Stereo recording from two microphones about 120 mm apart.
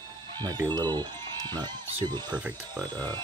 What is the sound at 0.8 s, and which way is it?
Speech, 35° right (ahead or behind).